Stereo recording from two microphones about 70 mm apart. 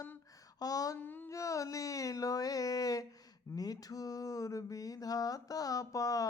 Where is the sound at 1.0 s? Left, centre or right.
Left.